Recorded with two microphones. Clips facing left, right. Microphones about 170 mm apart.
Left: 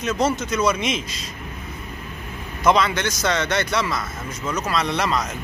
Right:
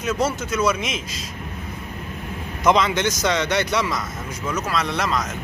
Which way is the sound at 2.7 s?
20° right (ahead or behind).